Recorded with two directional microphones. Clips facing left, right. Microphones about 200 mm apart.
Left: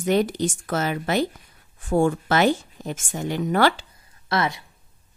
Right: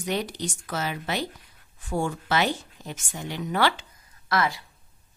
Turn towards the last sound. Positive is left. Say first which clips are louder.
# left 2 dB
turn(degrees=25)  # may be behind; listen again after turning